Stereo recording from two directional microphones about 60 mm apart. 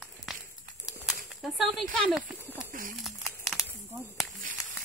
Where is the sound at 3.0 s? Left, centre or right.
Centre.